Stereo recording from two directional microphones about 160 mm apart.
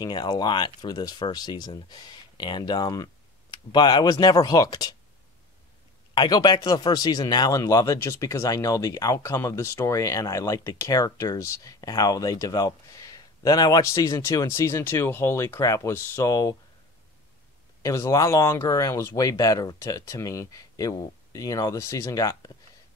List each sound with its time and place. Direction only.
0.0 s speech: 25° left (ahead or behind)
6.1 s speech: 25° left (ahead or behind)
17.8 s speech: 20° left (ahead or behind)